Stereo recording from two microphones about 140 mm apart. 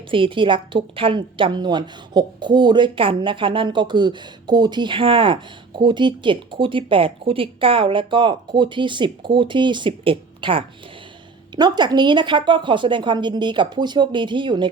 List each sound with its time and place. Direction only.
0.1 s a woman's voice: 40° right (ahead or behind)